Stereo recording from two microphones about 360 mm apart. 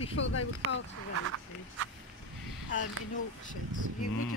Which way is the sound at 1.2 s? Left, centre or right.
Right.